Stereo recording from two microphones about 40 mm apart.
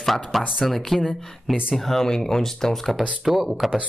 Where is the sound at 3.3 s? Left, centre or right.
Centre.